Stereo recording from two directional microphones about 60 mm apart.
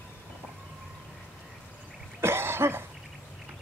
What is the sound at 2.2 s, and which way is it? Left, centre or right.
Cough, right.